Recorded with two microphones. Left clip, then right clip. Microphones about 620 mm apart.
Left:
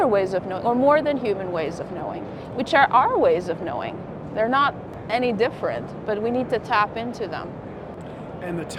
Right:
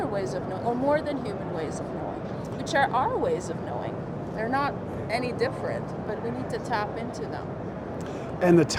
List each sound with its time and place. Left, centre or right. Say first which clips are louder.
0.0 s speech: left 9 dB; left
8.4 s speech: right 11 dB; right